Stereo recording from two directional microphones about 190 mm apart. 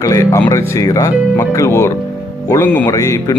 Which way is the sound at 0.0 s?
15° left (ahead or behind).